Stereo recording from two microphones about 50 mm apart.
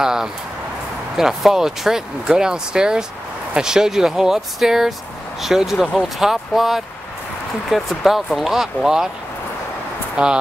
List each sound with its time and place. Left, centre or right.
0.0 s speech: centre
8.0 s speech: centre
10.2 s speech: centre